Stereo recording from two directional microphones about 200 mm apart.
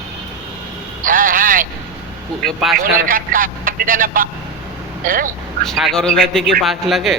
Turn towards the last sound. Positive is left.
turn(degrees=0)  # may be behind; listen again after turning